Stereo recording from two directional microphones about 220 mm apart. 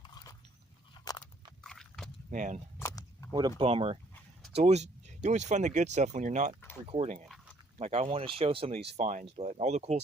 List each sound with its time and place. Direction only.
0.0 s dog: 15° left (ahead or behind)
1.6 s horse: centre (ahead or behind)
2.3 s speech: 35° right (ahead or behind)
2.7 s a sound: 15° left (ahead or behind)
3.6 s speech: 25° right (ahead or behind)